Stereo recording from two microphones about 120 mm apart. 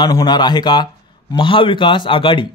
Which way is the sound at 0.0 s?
35° left (ahead or behind).